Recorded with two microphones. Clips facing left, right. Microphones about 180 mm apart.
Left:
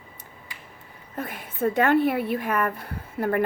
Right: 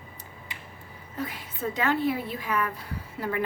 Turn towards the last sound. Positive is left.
turn(degrees=55)  # may be behind; listen again after turning